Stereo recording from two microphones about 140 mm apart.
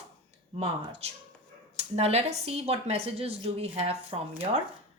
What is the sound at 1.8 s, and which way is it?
Speech, 45° right (ahead or behind).